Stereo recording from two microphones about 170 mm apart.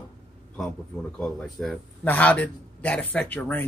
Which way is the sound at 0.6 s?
5° left (ahead or behind).